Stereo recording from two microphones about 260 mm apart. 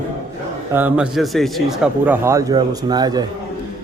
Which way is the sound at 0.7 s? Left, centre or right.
Centre.